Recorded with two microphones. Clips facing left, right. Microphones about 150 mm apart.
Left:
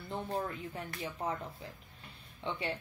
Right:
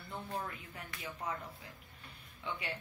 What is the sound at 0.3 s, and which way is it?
A woman's voice, 35° left (ahead or behind).